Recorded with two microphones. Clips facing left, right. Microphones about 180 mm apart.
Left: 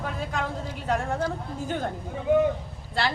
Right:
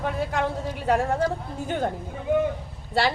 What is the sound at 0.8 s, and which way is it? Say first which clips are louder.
Speech: right 4 dB; 65° right (ahead or behind).